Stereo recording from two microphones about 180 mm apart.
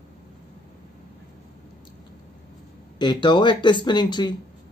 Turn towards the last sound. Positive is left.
turn(degrees=25)  # may be behind; listen again after turning